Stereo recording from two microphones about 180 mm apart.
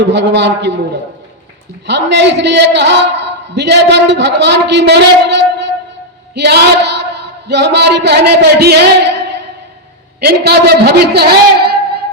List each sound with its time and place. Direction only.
0.0 s a man's voice: 75° right (ahead or behind)
1.9 s a man's voice: 75° right (ahead or behind)
6.3 s a sound: 70° right (ahead or behind)
10.2 s a man's voice: 65° right (ahead or behind)